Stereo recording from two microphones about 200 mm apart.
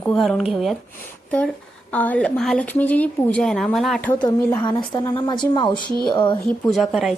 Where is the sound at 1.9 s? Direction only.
5° left (ahead or behind).